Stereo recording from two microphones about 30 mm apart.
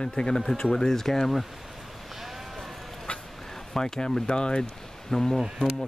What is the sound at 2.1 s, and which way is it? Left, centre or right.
Sheep, centre.